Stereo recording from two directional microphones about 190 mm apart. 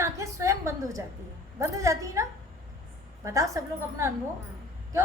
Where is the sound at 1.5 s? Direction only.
15° right (ahead or behind).